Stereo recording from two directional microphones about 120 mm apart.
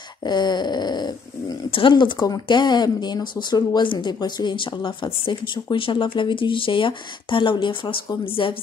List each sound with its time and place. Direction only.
0.2 s speech: 40° left (ahead or behind)